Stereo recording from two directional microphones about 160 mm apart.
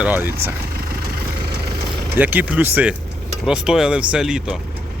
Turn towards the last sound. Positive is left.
turn(degrees=-5)  # may be behind; listen again after turning